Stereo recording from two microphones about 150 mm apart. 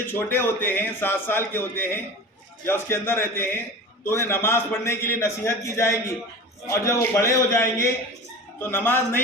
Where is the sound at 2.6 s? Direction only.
15° left (ahead or behind).